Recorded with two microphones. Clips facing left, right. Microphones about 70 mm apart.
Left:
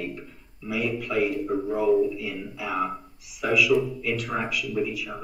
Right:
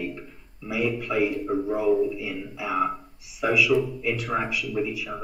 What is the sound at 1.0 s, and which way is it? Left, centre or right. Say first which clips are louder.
Speech: even; right.